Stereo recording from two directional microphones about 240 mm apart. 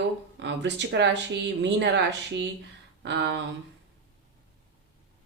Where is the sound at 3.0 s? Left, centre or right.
Right.